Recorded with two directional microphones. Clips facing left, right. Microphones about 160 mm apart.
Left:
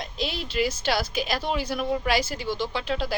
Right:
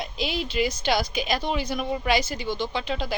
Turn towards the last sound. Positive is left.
turn(degrees=5)  # may be behind; listen again after turning